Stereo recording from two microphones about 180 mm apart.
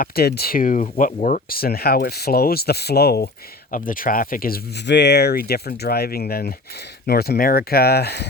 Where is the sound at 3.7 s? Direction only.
50° left (ahead or behind).